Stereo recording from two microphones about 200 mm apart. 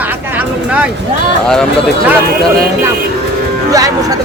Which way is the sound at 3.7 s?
15° right (ahead or behind).